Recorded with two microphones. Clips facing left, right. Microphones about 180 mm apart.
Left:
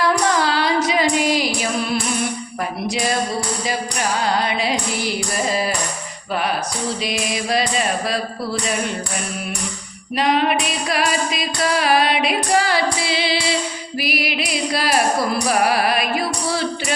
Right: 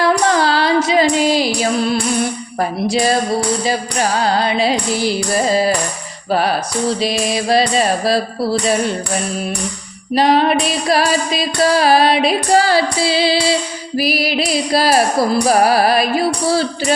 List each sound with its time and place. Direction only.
0.0 s music: 30° right (ahead or behind)
10.2 s music: 35° right (ahead or behind)